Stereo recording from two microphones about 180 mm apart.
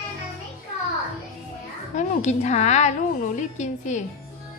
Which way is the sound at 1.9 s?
40° left (ahead or behind).